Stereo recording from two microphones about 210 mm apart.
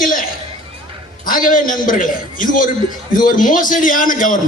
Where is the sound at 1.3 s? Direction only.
40° left (ahead or behind).